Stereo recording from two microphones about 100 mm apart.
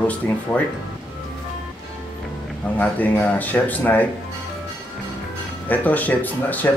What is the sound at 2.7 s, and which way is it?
Speech, 15° left (ahead or behind).